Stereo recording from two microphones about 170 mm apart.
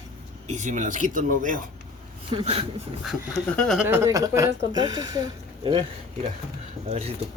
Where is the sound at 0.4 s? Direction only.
45° right (ahead or behind).